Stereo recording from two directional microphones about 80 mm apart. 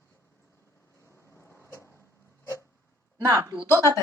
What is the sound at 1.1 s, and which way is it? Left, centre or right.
Vehicle, left.